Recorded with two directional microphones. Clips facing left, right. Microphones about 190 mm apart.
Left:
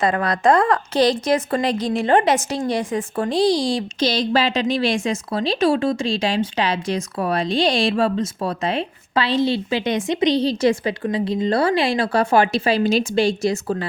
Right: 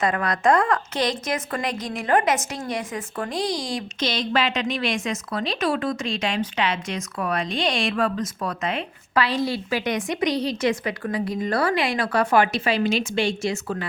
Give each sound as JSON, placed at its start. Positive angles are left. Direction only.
{"t": 0.0, "sound": "a woman's voice", "side_deg": 30}